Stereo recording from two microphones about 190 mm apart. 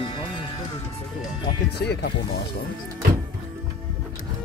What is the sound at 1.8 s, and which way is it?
Speech, 60° left (ahead or behind).